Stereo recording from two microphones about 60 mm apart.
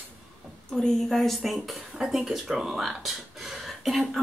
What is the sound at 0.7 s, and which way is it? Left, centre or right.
A woman's voice, centre.